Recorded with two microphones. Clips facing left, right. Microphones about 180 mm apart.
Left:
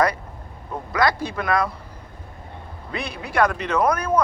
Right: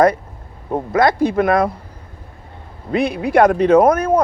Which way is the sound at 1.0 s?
50° right (ahead or behind).